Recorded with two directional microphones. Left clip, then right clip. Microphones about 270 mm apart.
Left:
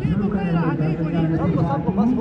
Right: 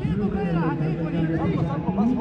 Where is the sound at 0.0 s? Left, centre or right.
Right.